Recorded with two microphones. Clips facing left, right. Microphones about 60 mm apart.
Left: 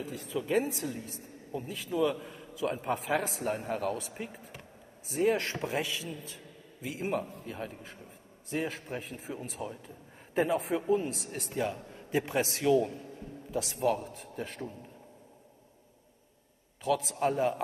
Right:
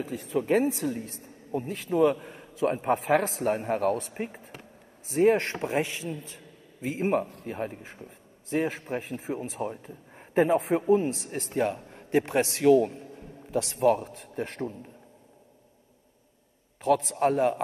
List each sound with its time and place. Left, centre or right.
0.4 s a man's voice: right
3.3 s a man's voice: right
8.5 s a man's voice: right
16.8 s a man's voice: right